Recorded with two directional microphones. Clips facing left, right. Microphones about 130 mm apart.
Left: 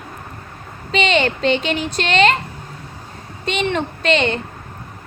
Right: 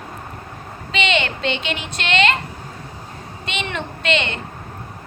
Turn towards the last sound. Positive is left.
turn(degrees=35)  # may be behind; listen again after turning